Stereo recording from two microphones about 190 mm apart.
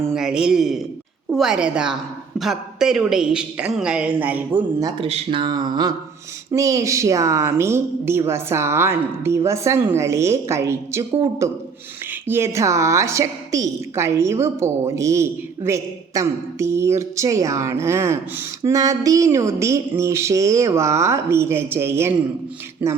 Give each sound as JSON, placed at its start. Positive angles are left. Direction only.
{"t": 0.1, "sound": "a woman's voice", "side_deg": -5}
{"t": 5.0, "sound": "a woman's voice", "side_deg": -30}